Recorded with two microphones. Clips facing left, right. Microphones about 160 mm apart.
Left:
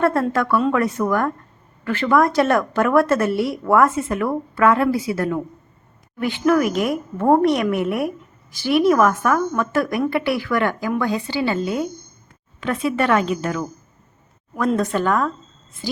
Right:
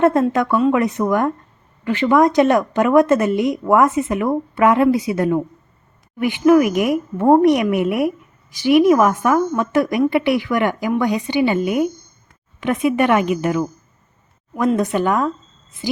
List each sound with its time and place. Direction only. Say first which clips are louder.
0.0 s speech: right 4 dB; 20° right (ahead or behind)
14.8 s speech: right 2 dB; 15° right (ahead or behind)